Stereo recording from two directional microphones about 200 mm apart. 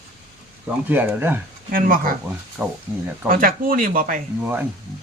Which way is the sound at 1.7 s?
45° right (ahead or behind).